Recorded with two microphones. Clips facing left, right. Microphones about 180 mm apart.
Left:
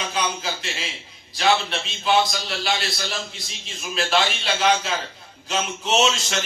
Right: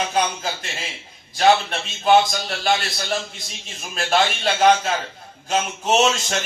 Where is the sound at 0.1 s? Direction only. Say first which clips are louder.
Right 3 dB; 50° right (ahead or behind).